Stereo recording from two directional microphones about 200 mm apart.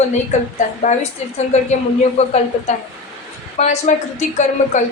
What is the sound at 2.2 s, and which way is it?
Speech, 30° left (ahead or behind).